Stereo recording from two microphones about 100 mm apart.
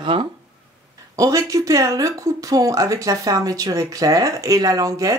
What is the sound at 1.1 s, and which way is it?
Speech, 35° right (ahead or behind).